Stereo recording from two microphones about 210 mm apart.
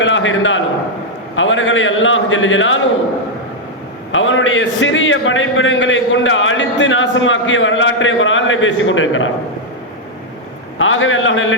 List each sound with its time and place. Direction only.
0.0 s a man's voice: 65° left (ahead or behind)
4.1 s a man's voice: 65° left (ahead or behind)
10.8 s a man's voice: 65° left (ahead or behind)